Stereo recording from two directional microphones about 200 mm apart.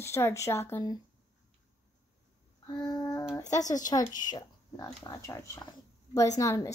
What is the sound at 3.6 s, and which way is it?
Speech, 40° left (ahead or behind).